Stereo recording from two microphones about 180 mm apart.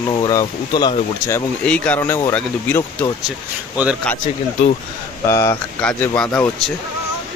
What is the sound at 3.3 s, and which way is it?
Speech, 5° right (ahead or behind).